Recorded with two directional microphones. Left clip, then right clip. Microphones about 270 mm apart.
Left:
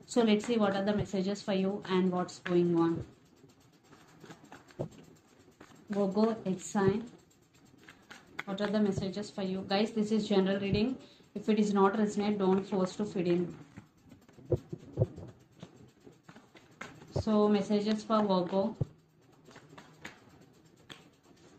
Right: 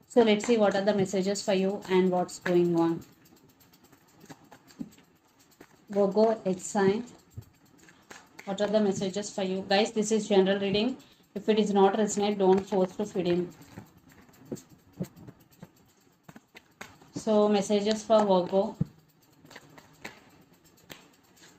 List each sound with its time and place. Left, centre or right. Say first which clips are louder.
0.1 s speech: right 6 dB; right
5.9 s speech: right 7 dB; right
8.4 s speech: right 6 dB; right
17.3 s speech: right 5 dB; right